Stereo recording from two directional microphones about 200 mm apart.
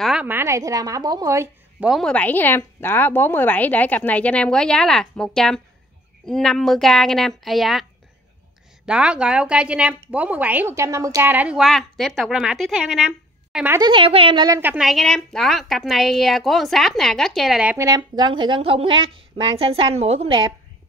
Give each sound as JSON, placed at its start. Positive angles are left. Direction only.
{"t": 0.0, "sound": "a woman's voice", "side_deg": -5}
{"t": 1.9, "sound": "a woman's voice", "side_deg": 5}
{"t": 8.8, "sound": "a woman's voice", "side_deg": -5}
{"t": 13.5, "sound": "a sound", "side_deg": -5}
{"t": 13.7, "sound": "a woman's voice", "side_deg": -25}
{"t": 14.6, "sound": "a woman's voice", "side_deg": -5}